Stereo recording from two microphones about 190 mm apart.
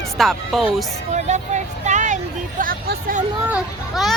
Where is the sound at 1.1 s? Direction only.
40° right (ahead or behind).